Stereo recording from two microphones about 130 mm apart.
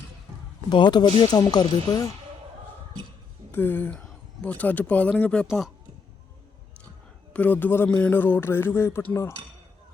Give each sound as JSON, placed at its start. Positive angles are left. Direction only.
{"t": 0.7, "sound": "speech", "side_deg": 35}
{"t": 3.5, "sound": "speech", "side_deg": 15}
{"t": 7.3, "sound": "speech", "side_deg": 15}